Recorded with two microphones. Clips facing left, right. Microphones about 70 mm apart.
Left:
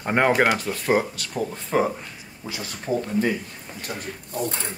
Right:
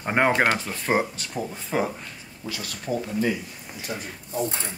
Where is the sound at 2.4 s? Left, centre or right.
Left.